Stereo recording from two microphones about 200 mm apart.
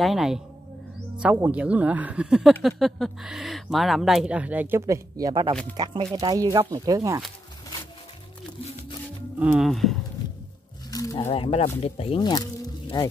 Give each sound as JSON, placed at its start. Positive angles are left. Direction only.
{"t": 0.0, "sound": "speech", "side_deg": 0}
{"t": 9.4, "sound": "speech", "side_deg": -5}
{"t": 10.9, "sound": "a sound", "side_deg": 20}
{"t": 11.2, "sound": "speech", "side_deg": 30}